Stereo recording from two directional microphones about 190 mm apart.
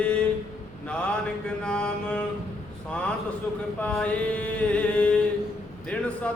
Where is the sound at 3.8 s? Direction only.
5° left (ahead or behind).